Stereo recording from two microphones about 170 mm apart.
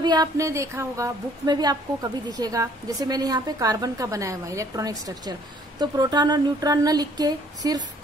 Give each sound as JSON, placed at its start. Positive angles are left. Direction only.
{"t": 0.0, "sound": "a woman's voice", "side_deg": -25}